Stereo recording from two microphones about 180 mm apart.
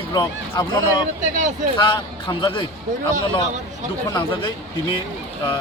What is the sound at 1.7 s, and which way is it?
Speech, 25° left (ahead or behind).